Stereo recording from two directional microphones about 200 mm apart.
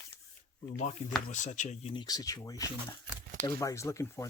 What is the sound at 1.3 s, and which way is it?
Speech, 35° left (ahead or behind).